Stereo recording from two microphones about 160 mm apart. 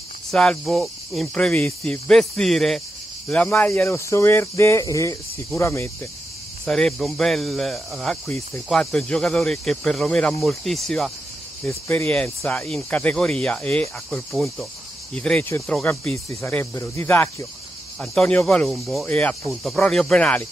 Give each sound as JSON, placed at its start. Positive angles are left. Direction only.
{"t": 0.3, "sound": "speech", "side_deg": 5}
{"t": 6.6, "sound": "speech", "side_deg": 5}
{"t": 11.6, "sound": "speech", "side_deg": 10}